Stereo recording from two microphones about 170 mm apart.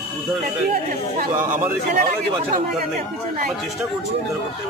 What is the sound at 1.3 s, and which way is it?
Speech, 10° right (ahead or behind).